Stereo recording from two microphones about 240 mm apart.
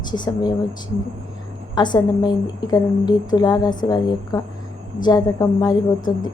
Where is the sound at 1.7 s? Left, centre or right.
Centre.